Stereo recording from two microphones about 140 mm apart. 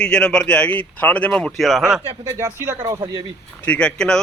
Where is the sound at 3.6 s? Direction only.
10° left (ahead or behind).